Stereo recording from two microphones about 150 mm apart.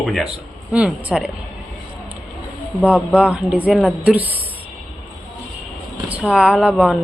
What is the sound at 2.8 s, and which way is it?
Speech, centre (ahead or behind).